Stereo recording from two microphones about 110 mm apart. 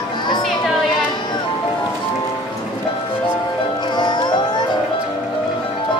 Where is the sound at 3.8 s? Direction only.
45° left (ahead or behind).